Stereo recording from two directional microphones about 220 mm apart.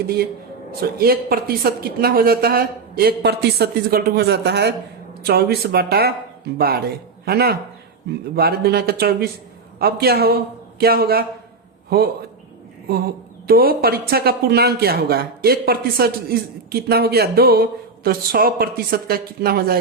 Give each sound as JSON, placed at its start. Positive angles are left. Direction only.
{"t": 0.7, "sound": "a man's voice", "side_deg": -45}
{"t": 13.5, "sound": "a man's voice", "side_deg": -45}